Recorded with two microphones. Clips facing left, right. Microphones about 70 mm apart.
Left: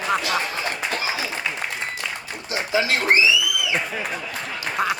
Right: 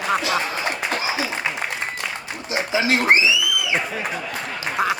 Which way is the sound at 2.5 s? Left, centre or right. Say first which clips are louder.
Right 2 dB; right.